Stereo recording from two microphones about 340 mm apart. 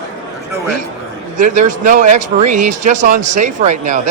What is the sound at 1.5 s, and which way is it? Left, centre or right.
Speech, right.